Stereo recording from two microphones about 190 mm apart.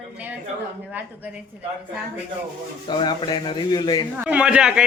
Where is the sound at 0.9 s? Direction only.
10° right (ahead or behind).